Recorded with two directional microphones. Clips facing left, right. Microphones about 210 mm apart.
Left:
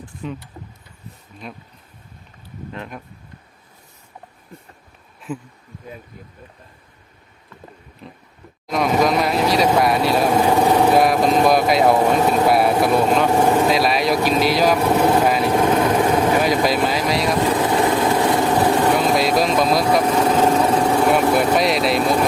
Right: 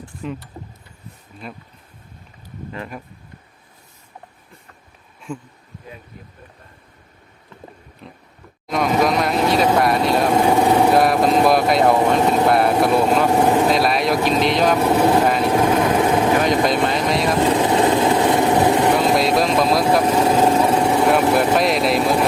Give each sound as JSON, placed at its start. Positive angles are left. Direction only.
{"t": 0.2, "sound": "speech", "side_deg": 0}
{"t": 1.4, "sound": "speech", "side_deg": 0}
{"t": 2.7, "sound": "speech", "side_deg": 0}
{"t": 5.3, "sound": "speech", "side_deg": 5}
{"t": 8.0, "sound": "speech", "side_deg": 0}
{"t": 17.4, "sound": "vehicle", "side_deg": -20}
{"t": 19.0, "sound": "speech", "side_deg": 0}